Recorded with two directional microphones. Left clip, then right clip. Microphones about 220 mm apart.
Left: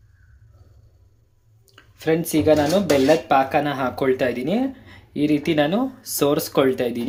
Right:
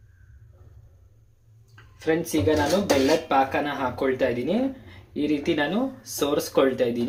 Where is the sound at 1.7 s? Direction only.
50° left (ahead or behind).